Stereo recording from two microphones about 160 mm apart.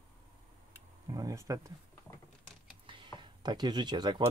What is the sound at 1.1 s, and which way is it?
Speech, 20° right (ahead or behind).